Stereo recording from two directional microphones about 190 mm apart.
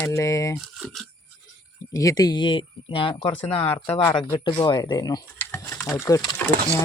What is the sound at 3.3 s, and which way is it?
Speech, 10° left (ahead or behind).